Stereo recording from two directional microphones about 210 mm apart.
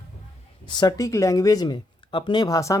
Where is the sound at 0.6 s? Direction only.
20° left (ahead or behind).